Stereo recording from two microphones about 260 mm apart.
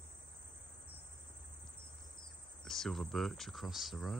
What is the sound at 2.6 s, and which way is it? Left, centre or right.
Speech, centre.